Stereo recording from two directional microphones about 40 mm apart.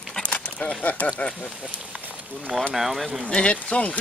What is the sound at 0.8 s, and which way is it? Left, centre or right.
Speech, left.